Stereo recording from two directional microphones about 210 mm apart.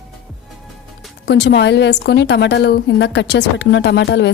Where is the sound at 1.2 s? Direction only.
55° left (ahead or behind).